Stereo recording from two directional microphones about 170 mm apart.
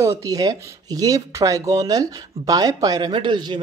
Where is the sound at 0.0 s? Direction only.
20° right (ahead or behind).